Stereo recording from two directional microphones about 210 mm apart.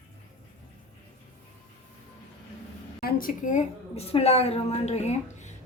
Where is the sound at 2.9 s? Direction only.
45° left (ahead or behind).